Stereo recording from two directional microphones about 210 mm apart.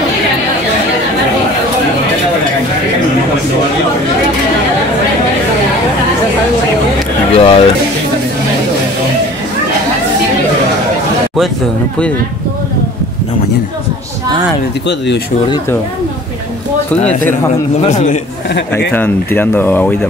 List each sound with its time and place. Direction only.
7.3 s music: 25° left (ahead or behind)
17.8 s a man's voice: 35° left (ahead or behind)
18.9 s speech: 10° left (ahead or behind)